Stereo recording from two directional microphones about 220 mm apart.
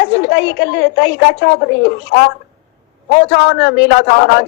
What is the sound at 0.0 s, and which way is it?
A woman's voice, 50° left (ahead or behind).